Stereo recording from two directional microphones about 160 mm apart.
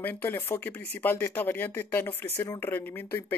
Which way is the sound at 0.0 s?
15° left (ahead or behind).